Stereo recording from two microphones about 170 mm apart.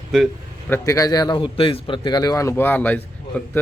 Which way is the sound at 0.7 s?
20° left (ahead or behind).